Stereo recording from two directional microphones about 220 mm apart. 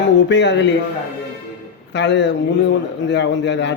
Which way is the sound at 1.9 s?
50° left (ahead or behind).